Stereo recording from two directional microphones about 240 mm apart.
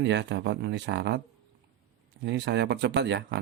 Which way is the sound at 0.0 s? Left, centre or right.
Right.